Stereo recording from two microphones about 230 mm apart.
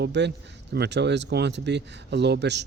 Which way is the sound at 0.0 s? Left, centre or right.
Right.